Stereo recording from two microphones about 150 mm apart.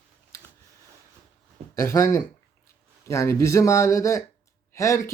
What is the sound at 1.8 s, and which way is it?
Speech, 20° left (ahead or behind).